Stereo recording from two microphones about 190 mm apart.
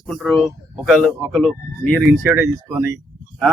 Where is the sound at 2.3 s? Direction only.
15° right (ahead or behind).